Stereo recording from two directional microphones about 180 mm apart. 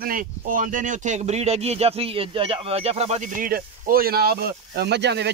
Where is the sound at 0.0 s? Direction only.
50° right (ahead or behind).